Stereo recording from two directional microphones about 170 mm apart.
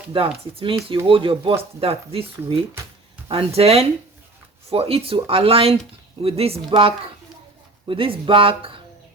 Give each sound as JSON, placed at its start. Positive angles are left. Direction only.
{"t": 0.1, "sound": "speech", "side_deg": -30}